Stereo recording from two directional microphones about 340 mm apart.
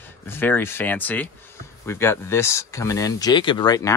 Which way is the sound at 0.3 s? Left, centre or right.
Centre.